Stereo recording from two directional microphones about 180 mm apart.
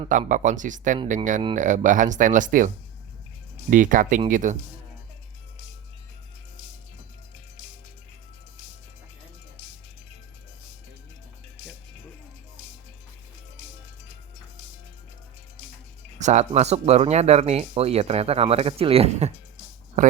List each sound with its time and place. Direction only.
0.1 s speech: 45° right (ahead or behind)
11.6 s music: 40° right (ahead or behind)
16.1 s speech: 40° right (ahead or behind)